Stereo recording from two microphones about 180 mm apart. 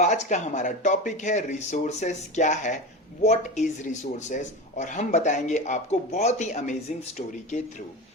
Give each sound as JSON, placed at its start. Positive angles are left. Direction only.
{"t": 0.0, "sound": "speech", "side_deg": 40}